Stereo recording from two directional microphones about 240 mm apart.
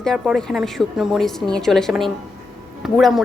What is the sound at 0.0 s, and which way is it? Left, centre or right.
A woman's voice, centre.